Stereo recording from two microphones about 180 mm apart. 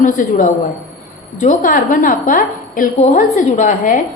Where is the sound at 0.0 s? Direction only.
45° left (ahead or behind).